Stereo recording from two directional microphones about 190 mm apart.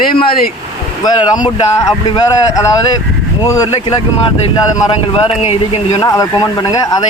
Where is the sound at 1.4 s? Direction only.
20° left (ahead or behind).